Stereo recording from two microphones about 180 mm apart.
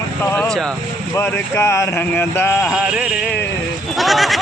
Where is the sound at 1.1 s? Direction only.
15° left (ahead or behind).